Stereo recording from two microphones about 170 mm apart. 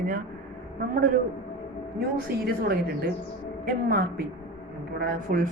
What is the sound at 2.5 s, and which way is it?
A woman's voice, 65° right (ahead or behind).